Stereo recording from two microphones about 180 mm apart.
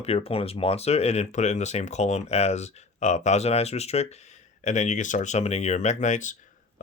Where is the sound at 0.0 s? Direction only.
35° left (ahead or behind).